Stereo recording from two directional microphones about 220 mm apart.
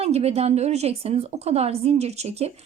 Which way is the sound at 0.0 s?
30° right (ahead or behind).